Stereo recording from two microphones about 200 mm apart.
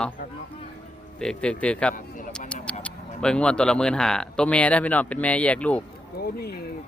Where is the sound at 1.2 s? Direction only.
5° left (ahead or behind).